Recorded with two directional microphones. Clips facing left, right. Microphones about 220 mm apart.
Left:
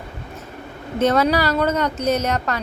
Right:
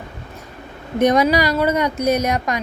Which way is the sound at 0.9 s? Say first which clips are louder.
Right 2 dB; 15° right (ahead or behind).